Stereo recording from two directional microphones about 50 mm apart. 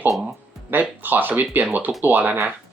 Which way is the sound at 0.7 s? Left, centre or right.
Right.